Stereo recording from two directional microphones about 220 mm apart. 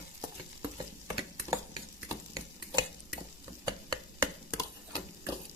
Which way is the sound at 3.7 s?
20° right (ahead or behind).